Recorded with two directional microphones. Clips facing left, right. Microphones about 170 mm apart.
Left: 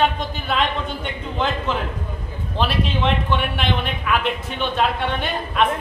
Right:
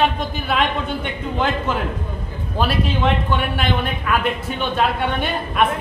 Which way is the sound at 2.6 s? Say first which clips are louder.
Right 2 dB; 5° right (ahead or behind).